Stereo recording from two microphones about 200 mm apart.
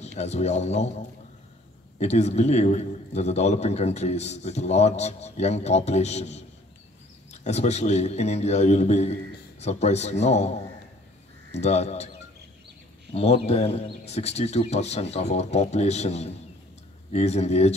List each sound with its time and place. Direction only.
0.0 s a man's voice: 35° left (ahead or behind)
11.6 s a man's voice: 35° left (ahead or behind)
13.1 s a man's voice: 30° left (ahead or behind)